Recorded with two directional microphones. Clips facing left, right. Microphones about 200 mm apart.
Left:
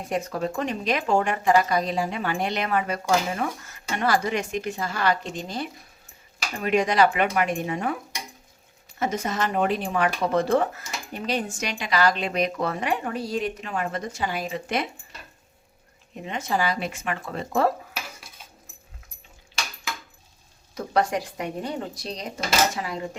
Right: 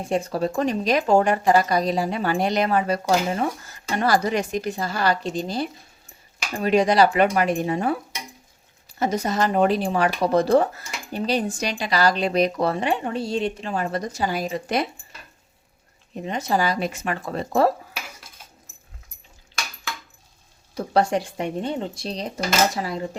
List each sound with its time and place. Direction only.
0.0 s speech: 30° right (ahead or behind)
9.0 s speech: 35° right (ahead or behind)
16.1 s speech: 35° right (ahead or behind)
20.7 s speech: 30° right (ahead or behind)